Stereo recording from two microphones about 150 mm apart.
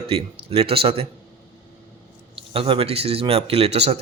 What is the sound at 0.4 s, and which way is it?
Speech, 40° right (ahead or behind).